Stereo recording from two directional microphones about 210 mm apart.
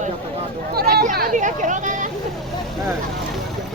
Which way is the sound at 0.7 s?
50° right (ahead or behind).